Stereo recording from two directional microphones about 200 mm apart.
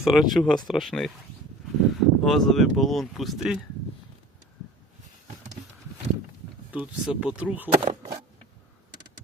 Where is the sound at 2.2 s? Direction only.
Centre (ahead or behind).